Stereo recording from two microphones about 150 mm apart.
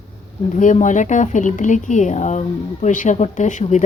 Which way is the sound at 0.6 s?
55° left (ahead or behind).